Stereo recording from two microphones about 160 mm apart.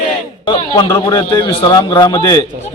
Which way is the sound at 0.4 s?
30° left (ahead or behind).